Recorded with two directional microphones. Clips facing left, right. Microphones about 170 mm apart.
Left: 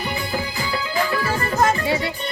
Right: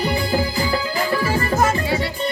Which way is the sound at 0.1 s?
35° right (ahead or behind).